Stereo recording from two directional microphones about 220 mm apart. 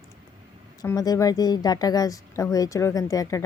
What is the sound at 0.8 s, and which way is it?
A woman's voice, 15° left (ahead or behind).